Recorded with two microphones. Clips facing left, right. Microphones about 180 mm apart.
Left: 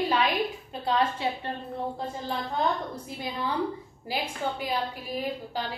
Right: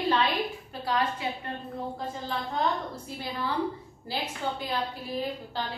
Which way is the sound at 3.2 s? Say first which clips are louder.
Left 1 dB; 20° left (ahead or behind).